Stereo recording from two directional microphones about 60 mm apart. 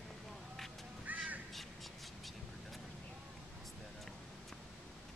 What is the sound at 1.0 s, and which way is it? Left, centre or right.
Crow, right.